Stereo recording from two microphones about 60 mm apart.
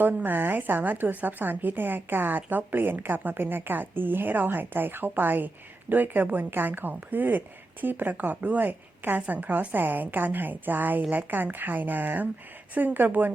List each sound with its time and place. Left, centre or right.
0.0 s a woman's voice: right